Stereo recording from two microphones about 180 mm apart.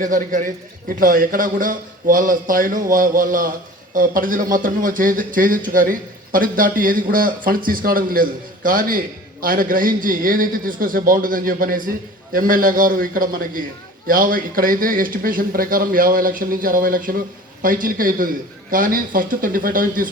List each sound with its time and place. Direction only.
0.0 s speech: 45° right (ahead or behind)